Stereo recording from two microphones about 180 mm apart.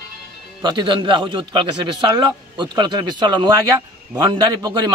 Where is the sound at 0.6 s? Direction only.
25° right (ahead or behind).